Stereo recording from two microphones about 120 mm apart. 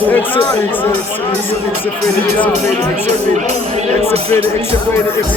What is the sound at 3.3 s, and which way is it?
Speech, 65° right (ahead or behind).